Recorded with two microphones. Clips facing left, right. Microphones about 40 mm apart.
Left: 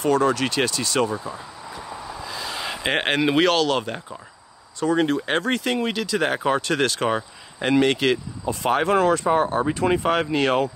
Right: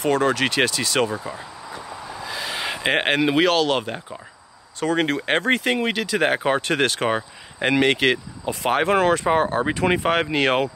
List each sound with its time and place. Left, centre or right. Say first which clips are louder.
0.3 s speech: right 2 dB; right
0.7 s speech: right 1 dB; right
1.0 s speech: even; right
2.2 s a sound: right 3 dB; right
2.8 s speech: right 1 dB; centre
3.6 s speech: right 1 dB; centre
4.7 s speech: left 1 dB; right
5.3 s speech: right 2 dB; right
7.7 s speech: even; right
9.2 s speech: even; right
10.0 s speech: right 1 dB; right